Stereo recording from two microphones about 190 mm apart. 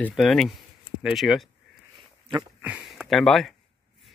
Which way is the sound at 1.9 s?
25° right (ahead or behind).